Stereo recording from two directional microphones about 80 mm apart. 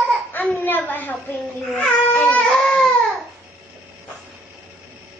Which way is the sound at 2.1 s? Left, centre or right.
Centre.